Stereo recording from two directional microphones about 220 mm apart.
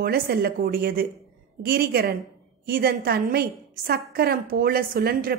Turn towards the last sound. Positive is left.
turn(degrees=-40)  # may be behind; listen again after turning